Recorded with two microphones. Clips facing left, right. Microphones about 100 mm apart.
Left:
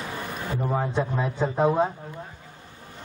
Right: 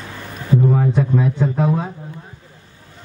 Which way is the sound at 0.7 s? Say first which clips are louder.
Right 7 dB; 25° left (ahead or behind).